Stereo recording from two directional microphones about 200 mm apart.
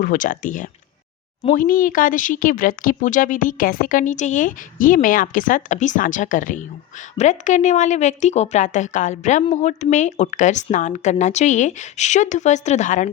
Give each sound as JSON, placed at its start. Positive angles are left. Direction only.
{"t": 0.0, "sound": "a woman's voice", "side_deg": 40}